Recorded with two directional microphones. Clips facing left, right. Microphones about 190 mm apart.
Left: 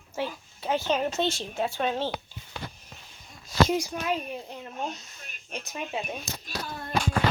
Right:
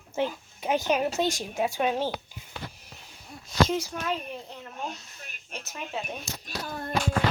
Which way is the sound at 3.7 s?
15° left (ahead or behind).